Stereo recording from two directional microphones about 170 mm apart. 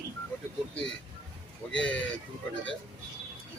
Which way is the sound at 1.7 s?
5° left (ahead or behind).